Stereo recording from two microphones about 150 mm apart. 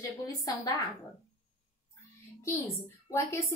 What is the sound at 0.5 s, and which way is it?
Speech, 25° left (ahead or behind).